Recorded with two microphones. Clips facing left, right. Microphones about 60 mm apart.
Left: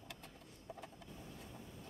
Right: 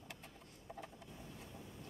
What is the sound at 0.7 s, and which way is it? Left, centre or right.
Vehicle, right.